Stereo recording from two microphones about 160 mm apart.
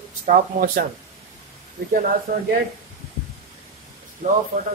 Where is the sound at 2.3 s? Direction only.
70° right (ahead or behind).